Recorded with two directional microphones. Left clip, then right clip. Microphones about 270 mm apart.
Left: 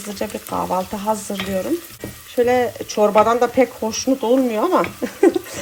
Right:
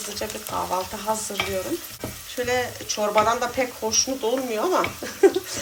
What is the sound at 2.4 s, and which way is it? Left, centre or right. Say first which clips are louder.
Speech: left 5 dB; centre.